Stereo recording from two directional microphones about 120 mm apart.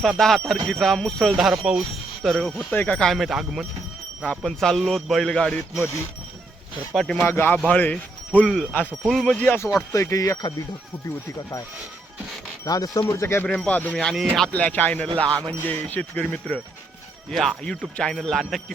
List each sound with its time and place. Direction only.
0.0 s speech: 5° left (ahead or behind)
6.9 s speech: 5° left (ahead or behind)
7.3 s speech: 15° left (ahead or behind)
9.9 s speech: 25° left (ahead or behind)
12.6 s speech: 30° left (ahead or behind)
13.5 s speech: 10° left (ahead or behind)